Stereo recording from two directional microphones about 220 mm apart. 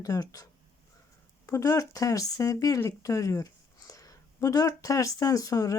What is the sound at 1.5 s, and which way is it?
Speech, 15° left (ahead or behind).